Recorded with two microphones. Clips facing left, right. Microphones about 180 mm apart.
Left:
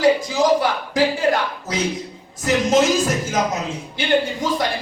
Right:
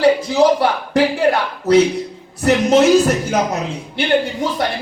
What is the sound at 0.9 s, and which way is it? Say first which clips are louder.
A woman's voice: right 3 dB; 60° right (ahead or behind).